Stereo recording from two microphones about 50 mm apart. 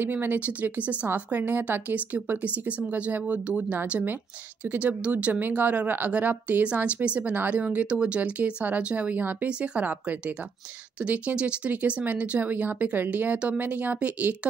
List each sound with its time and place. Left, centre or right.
0.0 s speech: right
0.4 s speech: right
9.2 s speech: right
9.5 s speech: right